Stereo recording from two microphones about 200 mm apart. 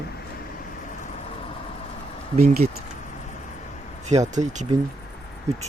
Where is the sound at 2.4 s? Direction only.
40° right (ahead or behind).